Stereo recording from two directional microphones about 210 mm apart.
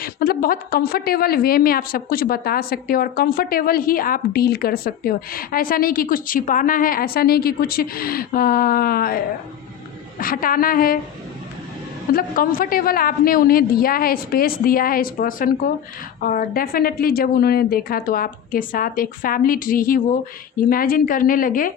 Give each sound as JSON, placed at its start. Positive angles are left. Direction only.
{"t": 0.0, "sound": "a woman's voice", "side_deg": 45}
{"t": 12.1, "sound": "a woman's voice", "side_deg": 40}